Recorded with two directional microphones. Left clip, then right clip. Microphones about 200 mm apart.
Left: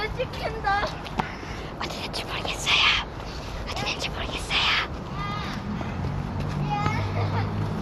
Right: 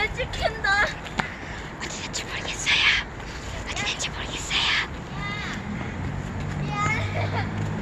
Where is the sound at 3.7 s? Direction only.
10° left (ahead or behind).